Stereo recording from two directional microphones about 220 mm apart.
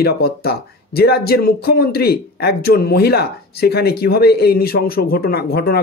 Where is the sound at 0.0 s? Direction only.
45° left (ahead or behind).